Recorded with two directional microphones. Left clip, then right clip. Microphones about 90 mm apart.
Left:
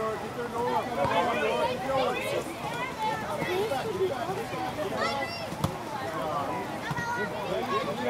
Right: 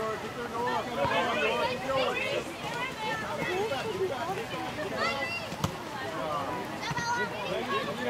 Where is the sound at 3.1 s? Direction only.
Centre (ahead or behind).